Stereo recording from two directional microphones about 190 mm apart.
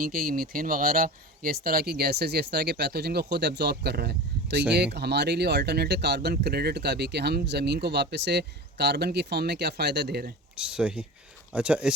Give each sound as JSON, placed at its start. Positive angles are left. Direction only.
{"t": 0.0, "sound": "speech", "side_deg": -50}
{"t": 10.5, "sound": "speech", "side_deg": -5}